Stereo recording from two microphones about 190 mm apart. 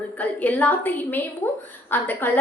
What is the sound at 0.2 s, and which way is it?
A woman's voice, 10° left (ahead or behind).